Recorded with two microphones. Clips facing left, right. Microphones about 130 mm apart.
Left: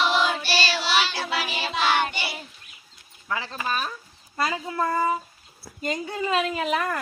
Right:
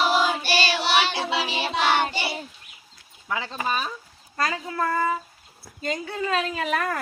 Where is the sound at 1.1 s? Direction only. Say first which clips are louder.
Right 3 dB; 25° right (ahead or behind).